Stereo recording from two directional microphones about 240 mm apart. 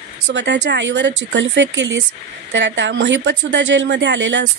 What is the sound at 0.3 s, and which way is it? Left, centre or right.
Speech, right.